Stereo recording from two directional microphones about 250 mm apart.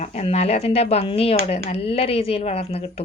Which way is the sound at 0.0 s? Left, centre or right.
Left.